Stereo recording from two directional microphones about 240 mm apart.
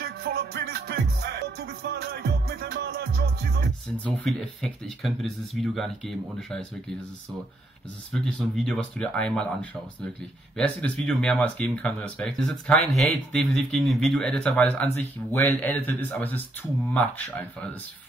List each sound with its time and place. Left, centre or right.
0.0 s music: right
4.2 s speech: centre
8.1 s speech: centre